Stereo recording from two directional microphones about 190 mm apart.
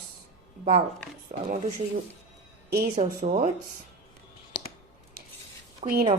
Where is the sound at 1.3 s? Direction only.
35° right (ahead or behind).